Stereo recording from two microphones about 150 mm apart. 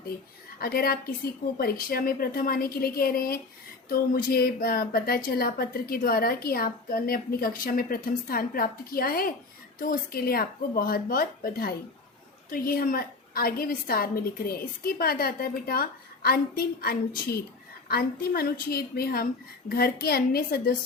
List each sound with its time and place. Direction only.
0.6 s a woman's voice: 90° left
1.5 s a woman's voice: 75° left (ahead or behind)